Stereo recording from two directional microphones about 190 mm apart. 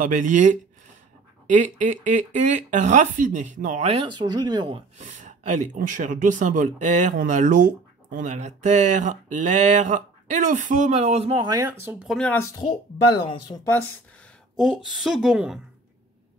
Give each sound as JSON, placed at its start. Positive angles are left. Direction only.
{"t": 0.0, "sound": "speech", "side_deg": -40}
{"t": 5.0, "sound": "speech", "side_deg": -40}
{"t": 11.6, "sound": "speech", "side_deg": -10}
{"t": 12.2, "sound": "speech", "side_deg": 10}
{"t": 14.6, "sound": "a woman's voice", "side_deg": 0}